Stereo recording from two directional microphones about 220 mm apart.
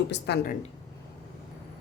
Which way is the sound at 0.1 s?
50° left (ahead or behind).